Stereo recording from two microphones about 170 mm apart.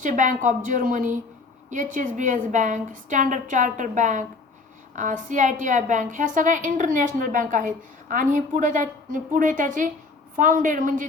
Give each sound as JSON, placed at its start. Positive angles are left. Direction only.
{"t": 0.0, "sound": "a woman's voice", "side_deg": -50}